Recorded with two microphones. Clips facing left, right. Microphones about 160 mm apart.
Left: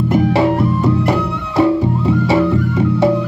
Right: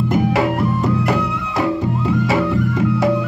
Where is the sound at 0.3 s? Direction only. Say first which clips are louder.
Left 3 dB; 30° left (ahead or behind).